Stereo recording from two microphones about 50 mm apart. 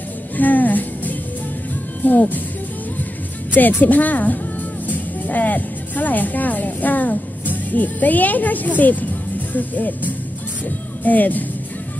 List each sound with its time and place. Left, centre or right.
0.4 s speech: left
3.5 s speech: left